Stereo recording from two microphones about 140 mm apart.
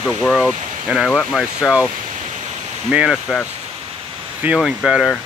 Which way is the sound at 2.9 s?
5° right (ahead or behind).